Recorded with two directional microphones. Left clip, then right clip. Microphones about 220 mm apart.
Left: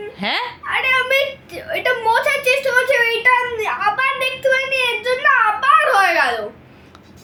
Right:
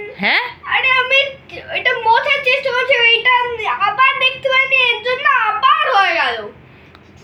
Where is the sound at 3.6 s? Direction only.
25° left (ahead or behind).